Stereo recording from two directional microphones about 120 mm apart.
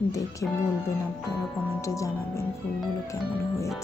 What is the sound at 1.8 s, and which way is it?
Speech, 25° left (ahead or behind).